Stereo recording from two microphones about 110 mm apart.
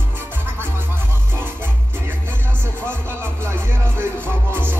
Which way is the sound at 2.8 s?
20° right (ahead or behind).